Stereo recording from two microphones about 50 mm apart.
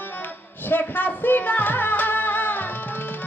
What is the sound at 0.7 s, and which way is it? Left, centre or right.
Music, left.